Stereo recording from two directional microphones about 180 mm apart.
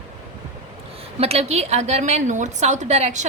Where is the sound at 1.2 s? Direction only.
35° right (ahead or behind).